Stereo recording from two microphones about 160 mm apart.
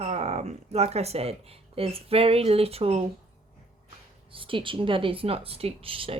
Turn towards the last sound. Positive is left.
turn(degrees=-35)  # may be behind; listen again after turning